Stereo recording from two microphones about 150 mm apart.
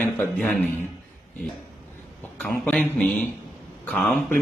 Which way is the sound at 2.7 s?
5° left (ahead or behind).